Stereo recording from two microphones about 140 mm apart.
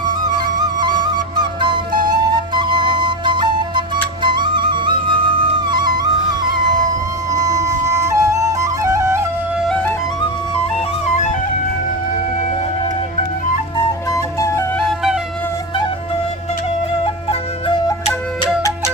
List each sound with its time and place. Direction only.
0.8 s flute: 35° right (ahead or behind)
1.9 s flute: 75° right (ahead or behind)
2.6 s flute: 35° right (ahead or behind)
7.6 s flute: 20° right (ahead or behind)
14.1 s flute: 25° left (ahead or behind)
14.8 s flute: 5° right (ahead or behind)